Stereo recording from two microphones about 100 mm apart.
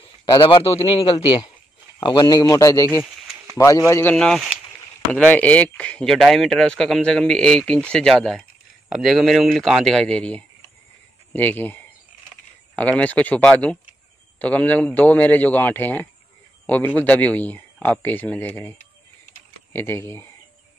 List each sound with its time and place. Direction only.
0.2 s a man's voice: 50° left (ahead or behind)
0.7 s speech: 80° left
1.1 s a man's voice: 55° left (ahead or behind); by 4.1 s 30° left (ahead or behind)
4.1 s a man's voice: 10° left (ahead or behind); by 20.2 s 25° left (ahead or behind)